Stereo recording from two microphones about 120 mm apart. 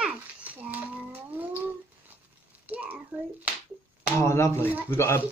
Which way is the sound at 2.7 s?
15° right (ahead or behind).